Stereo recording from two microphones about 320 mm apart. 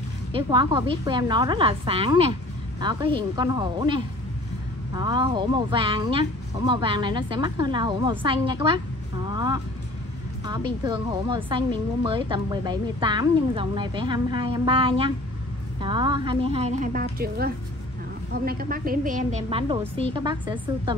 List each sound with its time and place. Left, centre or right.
0.3 s a woman's voice: centre